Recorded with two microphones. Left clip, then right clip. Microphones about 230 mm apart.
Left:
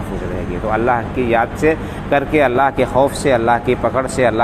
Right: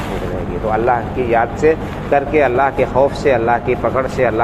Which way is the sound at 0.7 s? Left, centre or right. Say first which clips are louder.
Right 1 dB; left.